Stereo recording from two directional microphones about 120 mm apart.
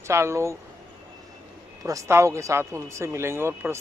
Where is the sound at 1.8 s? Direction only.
25° right (ahead or behind).